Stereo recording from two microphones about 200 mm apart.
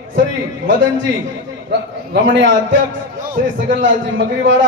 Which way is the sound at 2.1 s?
65° right (ahead or behind).